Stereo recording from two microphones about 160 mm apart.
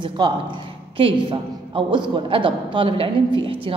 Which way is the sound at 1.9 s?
30° right (ahead or behind).